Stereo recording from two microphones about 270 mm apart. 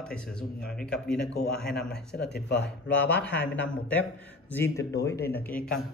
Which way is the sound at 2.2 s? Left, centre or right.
Left.